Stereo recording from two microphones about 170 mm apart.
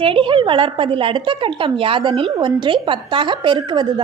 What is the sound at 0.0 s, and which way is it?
A woman's voice, 30° right (ahead or behind).